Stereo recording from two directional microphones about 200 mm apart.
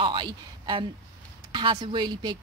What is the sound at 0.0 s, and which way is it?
A woman's voice, 25° right (ahead or behind).